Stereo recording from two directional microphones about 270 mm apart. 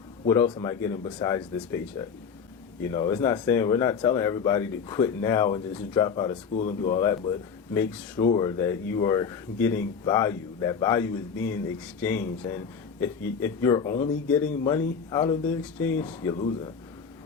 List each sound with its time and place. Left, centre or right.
0.3 s speech: centre
6.5 s speech: left
7.7 s speech: centre